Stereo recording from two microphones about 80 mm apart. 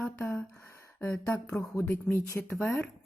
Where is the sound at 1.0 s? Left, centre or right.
Left.